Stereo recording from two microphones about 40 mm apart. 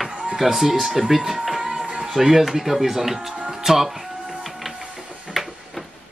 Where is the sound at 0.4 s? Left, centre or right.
Centre.